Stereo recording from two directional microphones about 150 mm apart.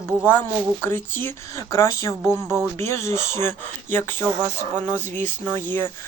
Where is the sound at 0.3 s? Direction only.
10° left (ahead or behind).